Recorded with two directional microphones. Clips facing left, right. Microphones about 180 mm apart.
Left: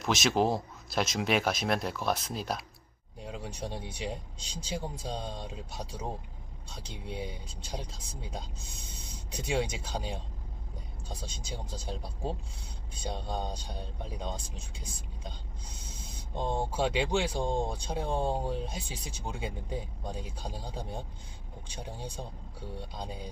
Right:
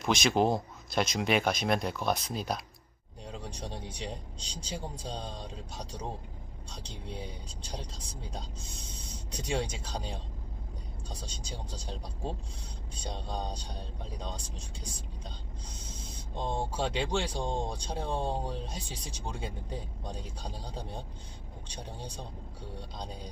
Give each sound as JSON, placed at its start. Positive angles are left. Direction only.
{"t": 0.0, "sound": "speech", "side_deg": 0}
{"t": 11.4, "sound": "speech", "side_deg": 5}
{"t": 16.3, "sound": "speech", "side_deg": 10}
{"t": 21.7, "sound": "speech", "side_deg": 5}